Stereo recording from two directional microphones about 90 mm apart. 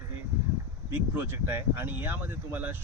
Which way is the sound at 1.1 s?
25° right (ahead or behind).